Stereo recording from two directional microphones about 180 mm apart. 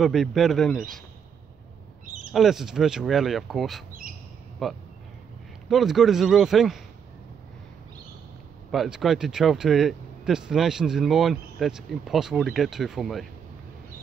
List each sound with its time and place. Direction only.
0.0 s speech: centre (ahead or behind)
2.0 s a sound: 45° right (ahead or behind)
2.3 s speech: centre (ahead or behind)
8.7 s speech: centre (ahead or behind)